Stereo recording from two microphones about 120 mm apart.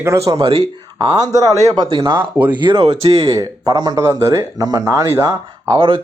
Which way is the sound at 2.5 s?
40° right (ahead or behind).